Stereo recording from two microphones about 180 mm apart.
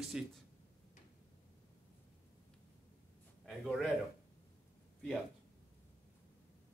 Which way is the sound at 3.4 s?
Centre (ahead or behind).